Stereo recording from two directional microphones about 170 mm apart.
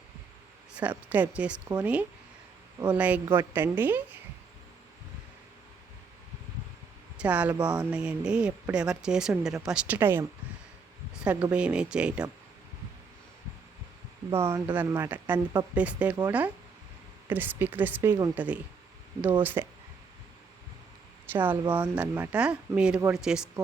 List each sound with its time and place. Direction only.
0.7 s speech: 10° right (ahead or behind)
7.2 s speech: 10° right (ahead or behind)
14.3 s speech: 15° right (ahead or behind)
17.2 s speech: 10° right (ahead or behind)
21.3 s a sound: 10° right (ahead or behind)
21.7 s speech: 10° right (ahead or behind)